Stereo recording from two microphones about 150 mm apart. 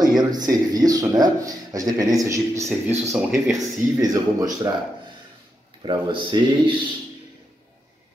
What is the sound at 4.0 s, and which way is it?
Speech, 25° right (ahead or behind).